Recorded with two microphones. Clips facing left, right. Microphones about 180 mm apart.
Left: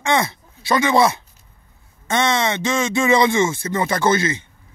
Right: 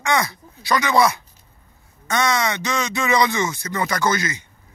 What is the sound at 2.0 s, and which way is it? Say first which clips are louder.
Speech: left 2 dB; 25° left (ahead or behind).